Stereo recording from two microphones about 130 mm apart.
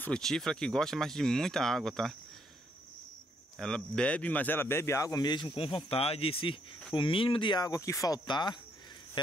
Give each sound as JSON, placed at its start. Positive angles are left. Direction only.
{"t": 0.0, "sound": "speech", "side_deg": 5}
{"t": 3.5, "sound": "speech", "side_deg": 5}